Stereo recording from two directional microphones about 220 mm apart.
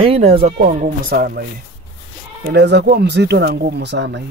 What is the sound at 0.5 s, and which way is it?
Speech, 40° right (ahead or behind).